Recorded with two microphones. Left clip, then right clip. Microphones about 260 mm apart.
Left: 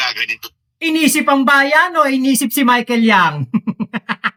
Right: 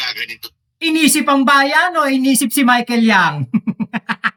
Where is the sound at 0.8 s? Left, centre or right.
Centre.